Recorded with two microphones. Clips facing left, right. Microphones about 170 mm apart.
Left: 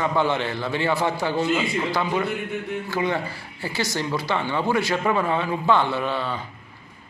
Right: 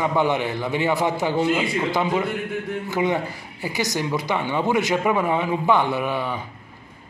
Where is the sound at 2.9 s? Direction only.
20° right (ahead or behind).